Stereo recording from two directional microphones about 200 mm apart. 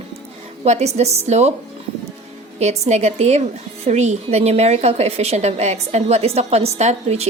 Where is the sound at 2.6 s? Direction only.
35° right (ahead or behind).